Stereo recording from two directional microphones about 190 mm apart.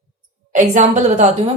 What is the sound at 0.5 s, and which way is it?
Speech, 40° right (ahead or behind).